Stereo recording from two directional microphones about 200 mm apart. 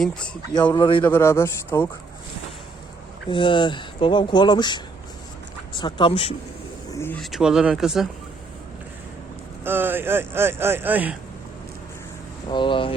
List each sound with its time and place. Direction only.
0.5 s speech: 20° left (ahead or behind)
1.0 s speech: 10° left (ahead or behind)
3.2 s speech: 25° left (ahead or behind)
5.8 s speech: 25° left (ahead or behind)
6.9 s speech: 10° left (ahead or behind)
7.2 s speech: centre (ahead or behind)
9.6 s speech: 10° right (ahead or behind)
12.5 s speech: 25° left (ahead or behind)